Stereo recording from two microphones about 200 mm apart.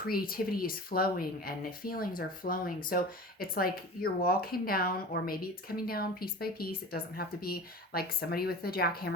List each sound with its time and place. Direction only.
0.1 s speech: 50° left (ahead or behind)